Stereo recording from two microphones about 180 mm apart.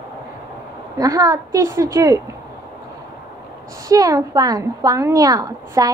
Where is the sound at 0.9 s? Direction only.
20° right (ahead or behind).